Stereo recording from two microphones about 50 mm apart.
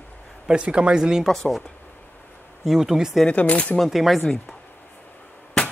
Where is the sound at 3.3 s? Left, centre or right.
Left.